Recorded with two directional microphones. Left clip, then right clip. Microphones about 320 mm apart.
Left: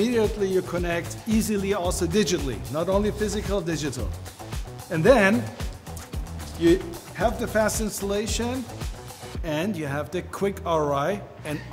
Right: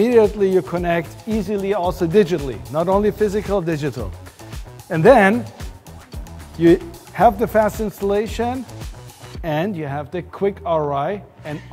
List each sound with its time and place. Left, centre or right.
0.0 s speech: right
1.3 s speech: right
1.9 s speech: right
6.6 s speech: right
7.2 s speech: right
8.1 s speech: right
9.4 s speech: right
9.8 s speech: right